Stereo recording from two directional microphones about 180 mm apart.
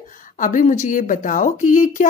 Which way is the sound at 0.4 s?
45° left (ahead or behind).